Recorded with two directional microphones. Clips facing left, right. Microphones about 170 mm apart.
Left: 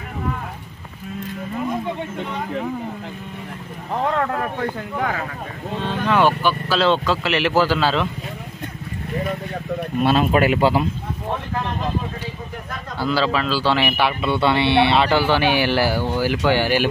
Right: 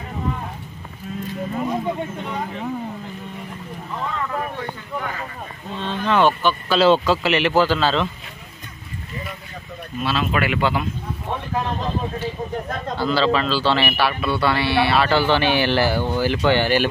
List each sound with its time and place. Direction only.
4.0 s speech: 70° left (ahead or behind)
5.8 s a man's voice: 10° left (ahead or behind)
6.8 s speech: 5° right (ahead or behind)
9.9 s speech: 50° left (ahead or behind)
10.3 s a man's voice: 40° left (ahead or behind)
12.9 s a man's voice: 10° left (ahead or behind)